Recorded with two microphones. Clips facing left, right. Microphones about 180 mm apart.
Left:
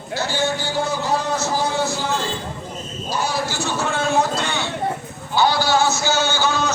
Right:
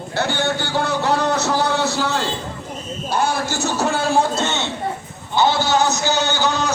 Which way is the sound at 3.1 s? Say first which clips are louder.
Right 3 dB; 55° right (ahead or behind).